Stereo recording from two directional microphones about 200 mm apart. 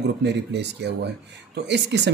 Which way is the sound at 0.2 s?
60° right (ahead or behind).